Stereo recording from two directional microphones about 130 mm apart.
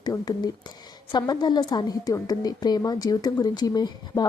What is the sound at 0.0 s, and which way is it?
Speech, 30° left (ahead or behind).